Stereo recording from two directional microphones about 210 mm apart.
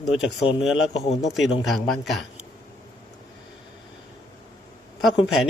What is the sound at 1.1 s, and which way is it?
Speech, 30° left (ahead or behind).